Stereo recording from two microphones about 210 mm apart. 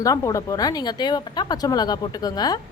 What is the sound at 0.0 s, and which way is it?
Speech, 15° left (ahead or behind).